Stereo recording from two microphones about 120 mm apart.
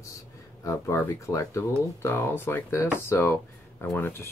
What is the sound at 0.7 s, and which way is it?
Speech, 25° left (ahead or behind).